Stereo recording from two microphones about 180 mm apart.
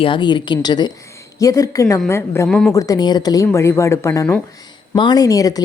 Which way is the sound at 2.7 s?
20° left (ahead or behind).